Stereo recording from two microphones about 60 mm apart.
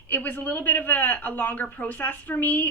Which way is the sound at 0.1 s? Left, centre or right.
Left.